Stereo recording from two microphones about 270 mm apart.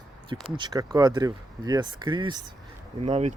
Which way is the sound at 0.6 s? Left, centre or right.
Centre.